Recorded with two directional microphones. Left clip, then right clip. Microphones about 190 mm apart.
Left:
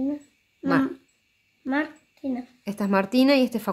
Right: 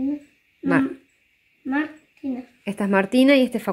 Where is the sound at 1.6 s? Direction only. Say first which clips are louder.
Right 1 dB; 15° left (ahead or behind).